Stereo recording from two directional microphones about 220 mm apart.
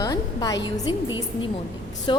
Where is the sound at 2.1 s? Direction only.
20° left (ahead or behind).